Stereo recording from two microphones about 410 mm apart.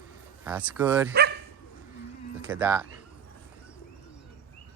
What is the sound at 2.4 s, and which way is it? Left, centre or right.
Speech, centre.